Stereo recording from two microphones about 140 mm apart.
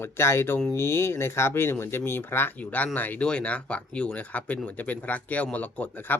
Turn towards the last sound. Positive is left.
turn(degrees=15)  # may be behind; listen again after turning